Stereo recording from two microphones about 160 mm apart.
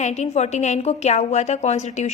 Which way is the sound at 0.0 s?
45° left (ahead or behind).